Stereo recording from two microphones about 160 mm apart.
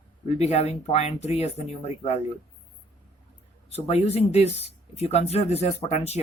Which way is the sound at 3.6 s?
40° left (ahead or behind).